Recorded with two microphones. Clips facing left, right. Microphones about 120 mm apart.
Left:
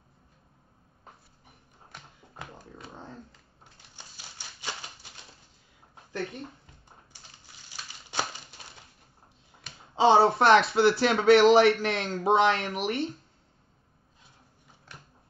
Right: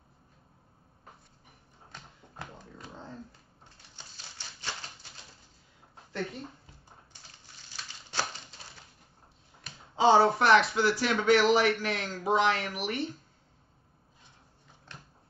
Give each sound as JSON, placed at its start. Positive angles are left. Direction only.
{"t": 1.9, "sound": "dog", "side_deg": 5}
{"t": 4.0, "sound": "typewriter", "side_deg": 10}
{"t": 7.7, "sound": "a sound", "side_deg": 15}
{"t": 9.9, "sound": "speech", "side_deg": 25}